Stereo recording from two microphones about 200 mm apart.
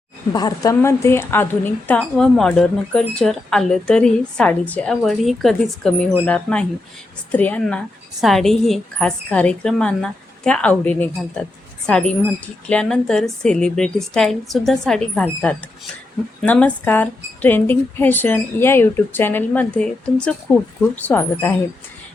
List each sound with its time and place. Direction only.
0.3 s a woman's voice: 20° left (ahead or behind)